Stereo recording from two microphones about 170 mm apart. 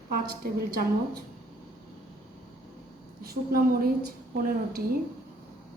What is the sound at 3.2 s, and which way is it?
Speech, 60° right (ahead or behind).